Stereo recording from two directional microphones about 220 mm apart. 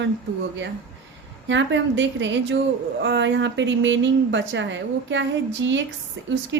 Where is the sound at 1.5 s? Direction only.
55° right (ahead or behind).